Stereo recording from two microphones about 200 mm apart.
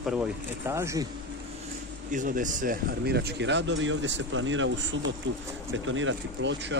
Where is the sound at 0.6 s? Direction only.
15° right (ahead or behind).